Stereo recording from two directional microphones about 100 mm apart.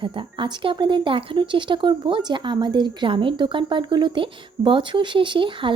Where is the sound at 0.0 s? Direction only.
55° right (ahead or behind).